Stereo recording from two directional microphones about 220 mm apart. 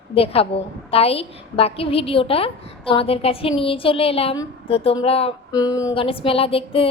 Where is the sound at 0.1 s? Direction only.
25° left (ahead or behind).